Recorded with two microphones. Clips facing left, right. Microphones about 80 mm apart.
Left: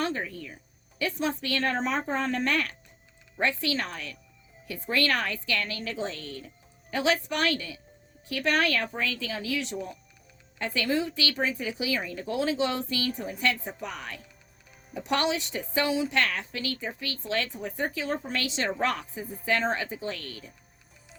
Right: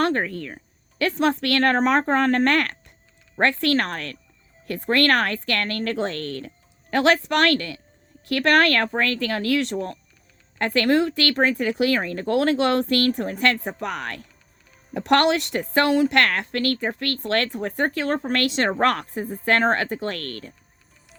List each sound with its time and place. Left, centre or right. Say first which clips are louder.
0.0 s a woman's voice: right 8 dB; right